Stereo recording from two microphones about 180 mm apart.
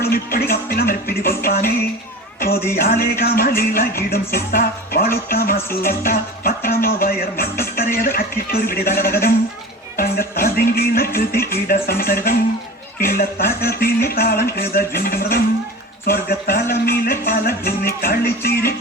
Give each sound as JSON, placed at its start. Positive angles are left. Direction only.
{"t": 0.0, "sound": "speech", "side_deg": 55}
{"t": 10.4, "sound": "speech", "side_deg": 55}